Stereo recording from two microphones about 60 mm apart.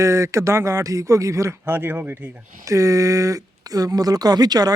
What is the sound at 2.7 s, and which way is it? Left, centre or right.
Speech, right.